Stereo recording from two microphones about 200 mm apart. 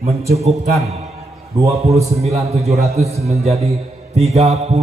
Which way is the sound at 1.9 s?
30° right (ahead or behind).